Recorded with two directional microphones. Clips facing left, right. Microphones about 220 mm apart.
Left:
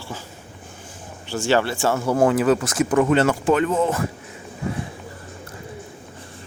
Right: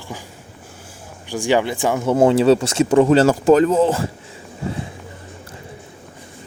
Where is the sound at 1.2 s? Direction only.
15° right (ahead or behind).